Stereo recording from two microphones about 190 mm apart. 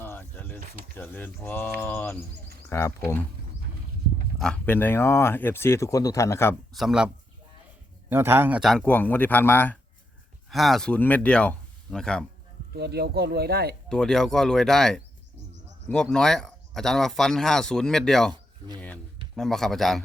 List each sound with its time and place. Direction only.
0.0 s cricket: 10° left (ahead or behind)
0.9 s speech: 10° left (ahead or behind)
4.4 s speech: 5° left (ahead or behind)
6.7 s speech: 5° right (ahead or behind)
8.1 s speech: 10° right (ahead or behind)
12.7 s speech: 60° right (ahead or behind)
13.8 s speech: 5° left (ahead or behind)
19.4 s speech: centre (ahead or behind)